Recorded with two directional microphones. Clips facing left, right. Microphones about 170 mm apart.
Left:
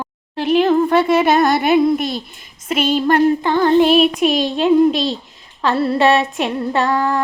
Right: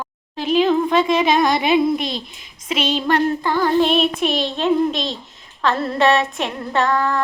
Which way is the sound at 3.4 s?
20° left (ahead or behind).